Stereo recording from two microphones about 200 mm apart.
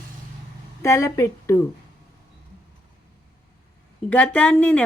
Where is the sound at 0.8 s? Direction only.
15° left (ahead or behind).